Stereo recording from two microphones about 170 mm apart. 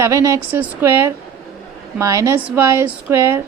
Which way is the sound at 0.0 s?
20° right (ahead or behind).